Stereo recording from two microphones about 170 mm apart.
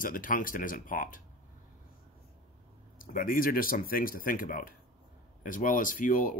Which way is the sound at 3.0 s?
55° left (ahead or behind).